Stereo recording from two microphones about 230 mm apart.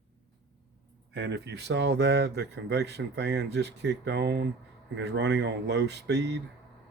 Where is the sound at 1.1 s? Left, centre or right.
Right.